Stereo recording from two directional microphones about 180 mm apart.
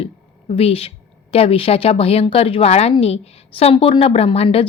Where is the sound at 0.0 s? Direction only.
30° left (ahead or behind).